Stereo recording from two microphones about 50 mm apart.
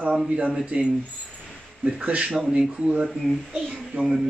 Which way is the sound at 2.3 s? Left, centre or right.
Centre.